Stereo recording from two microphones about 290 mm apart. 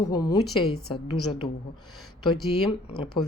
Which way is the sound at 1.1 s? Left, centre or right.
Left.